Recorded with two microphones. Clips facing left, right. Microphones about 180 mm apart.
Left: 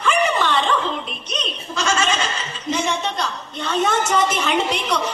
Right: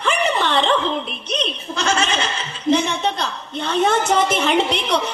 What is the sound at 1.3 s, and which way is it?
Chuckle, 60° right (ahead or behind).